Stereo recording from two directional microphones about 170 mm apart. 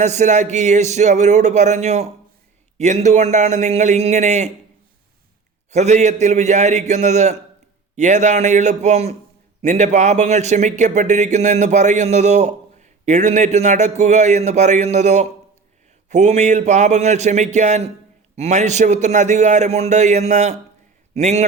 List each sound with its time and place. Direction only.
0.0 s speech: 45° right (ahead or behind)
5.7 s a man's voice: 45° right (ahead or behind)